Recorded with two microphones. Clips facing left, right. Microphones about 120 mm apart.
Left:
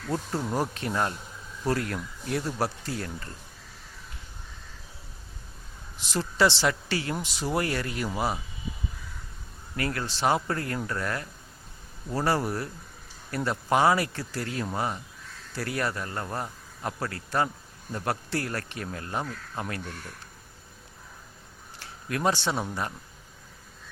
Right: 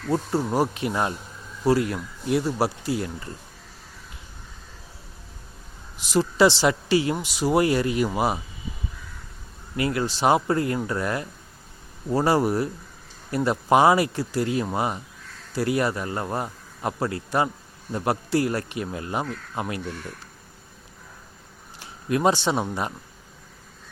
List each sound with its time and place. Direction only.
0.1 s speech: 10° right (ahead or behind)
6.0 s speech: 15° right (ahead or behind)
9.7 s speech: 15° right (ahead or behind)
21.8 s speech: 20° right (ahead or behind)